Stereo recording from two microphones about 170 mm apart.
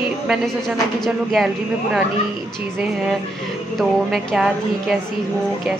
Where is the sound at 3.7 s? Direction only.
Centre (ahead or behind).